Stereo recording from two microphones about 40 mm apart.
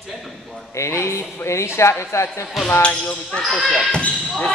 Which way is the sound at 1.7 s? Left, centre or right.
Left.